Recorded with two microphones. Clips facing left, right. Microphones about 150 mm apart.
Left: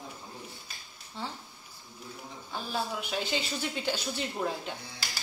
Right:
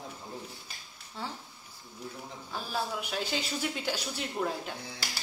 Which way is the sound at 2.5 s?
Centre (ahead or behind).